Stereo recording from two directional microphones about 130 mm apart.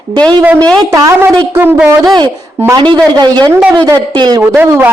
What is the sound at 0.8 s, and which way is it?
A woman's voice, 25° right (ahead or behind).